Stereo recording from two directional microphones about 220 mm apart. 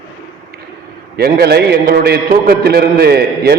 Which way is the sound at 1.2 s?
45° right (ahead or behind).